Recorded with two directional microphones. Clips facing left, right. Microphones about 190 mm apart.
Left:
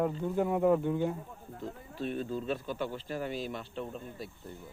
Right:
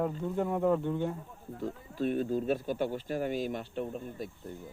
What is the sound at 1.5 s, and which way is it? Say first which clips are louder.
Speech: right 5 dB; 45° right (ahead or behind).